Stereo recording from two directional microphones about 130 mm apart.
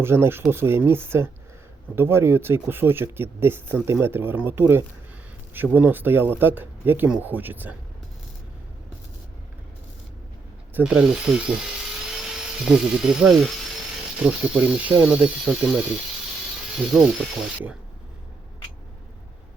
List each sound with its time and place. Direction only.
0.0 s speech: 20° right (ahead or behind)
10.8 s speech: 5° right (ahead or behind)